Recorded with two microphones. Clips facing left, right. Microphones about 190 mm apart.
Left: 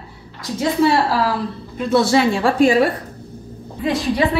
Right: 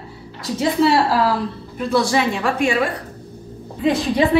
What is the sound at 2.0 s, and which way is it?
Speech, 30° left (ahead or behind).